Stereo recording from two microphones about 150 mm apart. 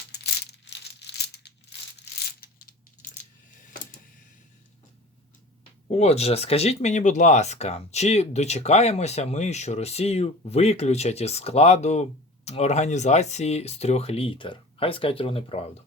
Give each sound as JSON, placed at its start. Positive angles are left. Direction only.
{"t": 0.9, "sound": "crumpling", "side_deg": 90}
{"t": 2.4, "sound": "coin", "side_deg": 80}
{"t": 5.9, "sound": "speech", "side_deg": 45}